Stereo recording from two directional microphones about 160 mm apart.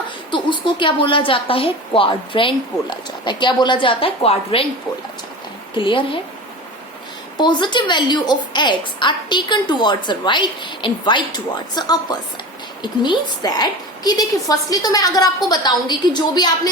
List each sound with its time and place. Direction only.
0.3 s a woman's voice: 30° left (ahead or behind)
5.7 s a woman's voice: 30° left (ahead or behind)
7.3 s a woman's voice: 30° left (ahead or behind)